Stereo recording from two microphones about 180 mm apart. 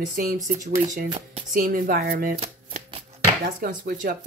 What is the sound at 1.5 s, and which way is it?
Speech, 50° right (ahead or behind).